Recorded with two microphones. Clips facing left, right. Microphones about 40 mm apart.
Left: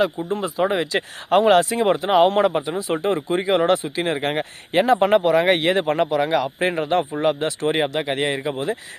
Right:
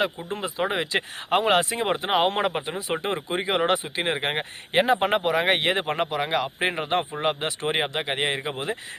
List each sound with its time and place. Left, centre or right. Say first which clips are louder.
0.3 s speech: left 5 dB; centre
2.0 s speech: left 7 dB; right